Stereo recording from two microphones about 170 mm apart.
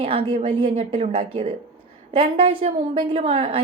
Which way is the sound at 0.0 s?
35° right (ahead or behind).